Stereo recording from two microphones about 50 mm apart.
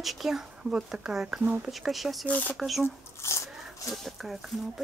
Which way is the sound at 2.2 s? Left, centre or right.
Left.